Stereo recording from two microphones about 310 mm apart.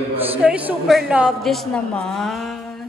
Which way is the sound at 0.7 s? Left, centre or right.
Centre.